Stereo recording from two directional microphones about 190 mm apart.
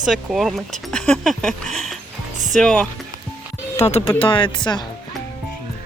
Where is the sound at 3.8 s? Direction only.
35° left (ahead or behind).